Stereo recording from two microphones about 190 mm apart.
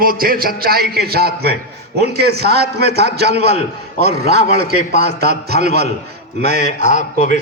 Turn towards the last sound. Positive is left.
turn(degrees=40)  # may be behind; listen again after turning